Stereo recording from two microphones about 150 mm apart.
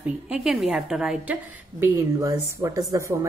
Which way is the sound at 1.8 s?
20° right (ahead or behind).